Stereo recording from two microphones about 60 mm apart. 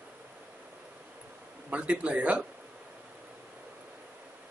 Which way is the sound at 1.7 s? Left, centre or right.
Right.